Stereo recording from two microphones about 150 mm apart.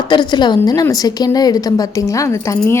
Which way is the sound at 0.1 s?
30° left (ahead or behind).